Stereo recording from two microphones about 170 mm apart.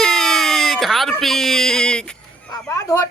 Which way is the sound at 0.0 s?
5° left (ahead or behind).